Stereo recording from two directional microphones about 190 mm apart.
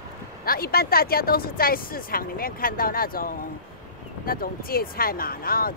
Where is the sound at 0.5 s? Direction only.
50° left (ahead or behind).